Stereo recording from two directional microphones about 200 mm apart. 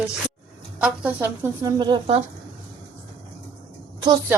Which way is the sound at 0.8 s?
10° right (ahead or behind).